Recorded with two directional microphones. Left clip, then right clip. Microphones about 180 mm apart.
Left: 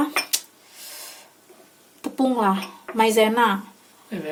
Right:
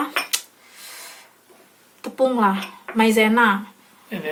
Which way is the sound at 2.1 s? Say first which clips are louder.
Right 3 dB; 55° left (ahead or behind).